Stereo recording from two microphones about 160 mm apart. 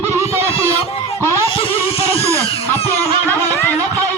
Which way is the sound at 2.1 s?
20° right (ahead or behind).